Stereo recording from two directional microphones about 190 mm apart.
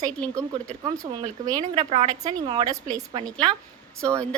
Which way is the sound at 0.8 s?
15° right (ahead or behind).